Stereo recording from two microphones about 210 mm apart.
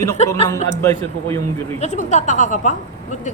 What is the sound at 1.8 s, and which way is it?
Speech, 35° left (ahead or behind).